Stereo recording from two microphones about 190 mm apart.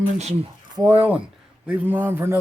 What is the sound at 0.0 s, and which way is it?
Speech, 35° right (ahead or behind).